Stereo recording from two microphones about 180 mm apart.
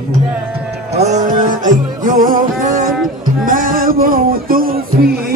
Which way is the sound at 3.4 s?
50° right (ahead or behind).